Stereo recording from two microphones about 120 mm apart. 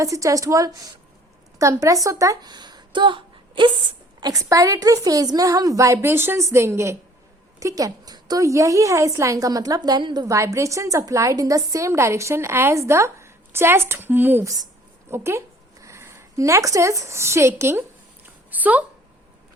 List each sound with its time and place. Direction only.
0.0 s a woman's voice: 25° right (ahead or behind); by 3.7 s 40° right (ahead or behind)
4.2 s a woman's voice: 30° right (ahead or behind)
10.2 s a woman's voice: 25° right (ahead or behind)
14.4 s speech: 30° right (ahead or behind)
18.5 s a sound: 15° right (ahead or behind)